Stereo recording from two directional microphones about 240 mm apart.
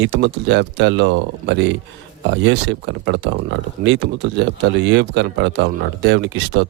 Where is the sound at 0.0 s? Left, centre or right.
Right.